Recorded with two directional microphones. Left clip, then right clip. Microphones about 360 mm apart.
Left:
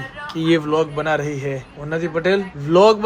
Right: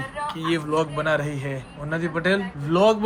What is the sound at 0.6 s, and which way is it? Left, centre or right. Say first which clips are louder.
A man's voice: left 4 dB; centre.